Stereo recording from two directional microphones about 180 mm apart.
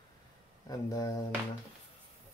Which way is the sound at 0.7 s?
20° left (ahead or behind).